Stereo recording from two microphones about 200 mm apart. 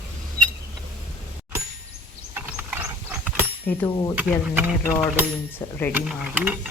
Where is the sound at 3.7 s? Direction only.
10° left (ahead or behind).